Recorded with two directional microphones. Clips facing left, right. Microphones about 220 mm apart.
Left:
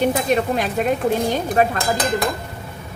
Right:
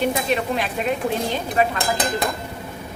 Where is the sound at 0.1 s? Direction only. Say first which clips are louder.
Left 3 dB; 45° left (ahead or behind).